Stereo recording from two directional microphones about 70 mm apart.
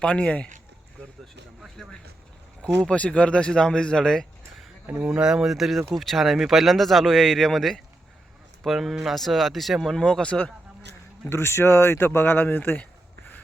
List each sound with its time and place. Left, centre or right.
0.0 s speech: centre
1.8 s speech: centre
4.9 s speech: right
5.2 s speech: centre
11.3 s speech: left